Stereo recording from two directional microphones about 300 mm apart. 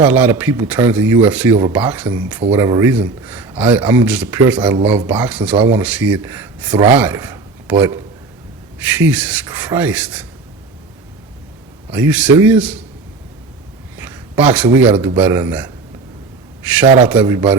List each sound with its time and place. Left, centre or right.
0.0 s speech: centre
11.9 s speech: centre
14.0 s a man's voice: centre
16.8 s speech: right
17.1 s speech: centre